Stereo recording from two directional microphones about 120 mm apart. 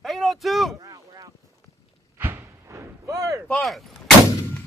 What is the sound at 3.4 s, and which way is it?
Speech, centre (ahead or behind).